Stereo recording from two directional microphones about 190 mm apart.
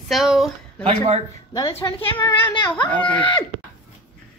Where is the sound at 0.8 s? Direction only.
35° right (ahead or behind).